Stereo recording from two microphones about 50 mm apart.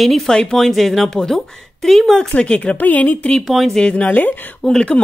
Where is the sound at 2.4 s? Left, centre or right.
Left.